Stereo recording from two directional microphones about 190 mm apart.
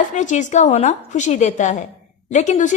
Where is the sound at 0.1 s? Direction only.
40° left (ahead or behind).